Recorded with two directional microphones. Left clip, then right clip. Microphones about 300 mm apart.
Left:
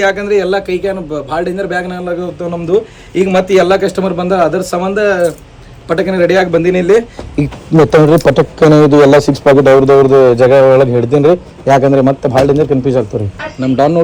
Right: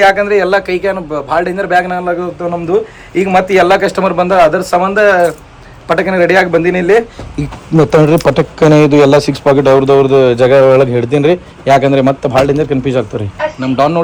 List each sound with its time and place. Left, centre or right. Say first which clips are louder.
0.2 s a man's voice: right 2 dB; centre
7.8 s a man's voice: left 1 dB; centre